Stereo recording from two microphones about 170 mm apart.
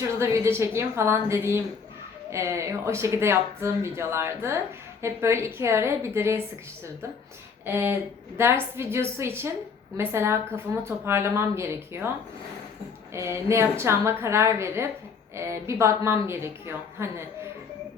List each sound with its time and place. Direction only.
0.2 s speech: 15° right (ahead or behind)
7.6 s speech: 15° right (ahead or behind)
13.1 s speech: 15° right (ahead or behind)